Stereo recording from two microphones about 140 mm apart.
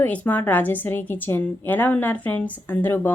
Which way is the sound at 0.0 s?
10° left (ahead or behind).